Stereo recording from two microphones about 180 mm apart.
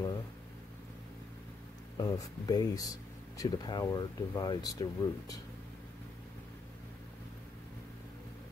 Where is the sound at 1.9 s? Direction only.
20° left (ahead or behind).